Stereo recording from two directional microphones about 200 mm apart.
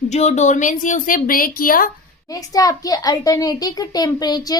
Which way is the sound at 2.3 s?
15° left (ahead or behind).